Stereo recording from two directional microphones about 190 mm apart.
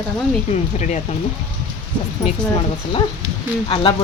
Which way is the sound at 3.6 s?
25° left (ahead or behind).